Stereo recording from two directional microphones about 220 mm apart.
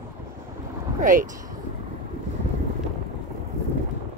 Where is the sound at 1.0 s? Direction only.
35° right (ahead or behind).